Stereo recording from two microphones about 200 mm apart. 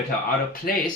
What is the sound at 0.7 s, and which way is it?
Speech, 45° left (ahead or behind).